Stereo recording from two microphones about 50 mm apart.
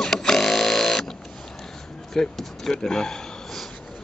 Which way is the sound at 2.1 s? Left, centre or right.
Centre.